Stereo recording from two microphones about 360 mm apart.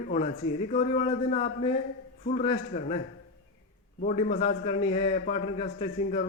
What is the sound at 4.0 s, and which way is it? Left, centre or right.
A man's voice, centre.